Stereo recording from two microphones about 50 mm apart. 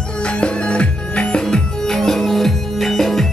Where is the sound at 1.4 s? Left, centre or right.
Centre.